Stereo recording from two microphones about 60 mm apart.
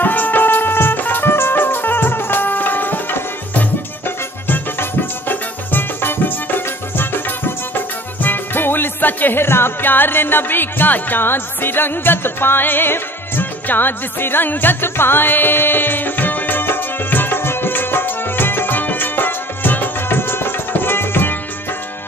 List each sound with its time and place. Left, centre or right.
0.0 s music: left
5.3 s music: left